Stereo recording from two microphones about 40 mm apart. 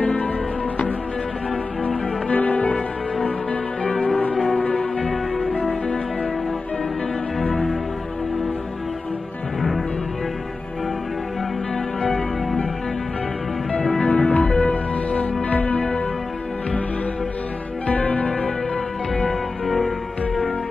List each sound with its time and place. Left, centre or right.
0.0 s music: left
2.3 s music: left
9.6 s music: centre
11.7 s music: centre
14.0 s music: left
17.8 s music: left
19.6 s music: centre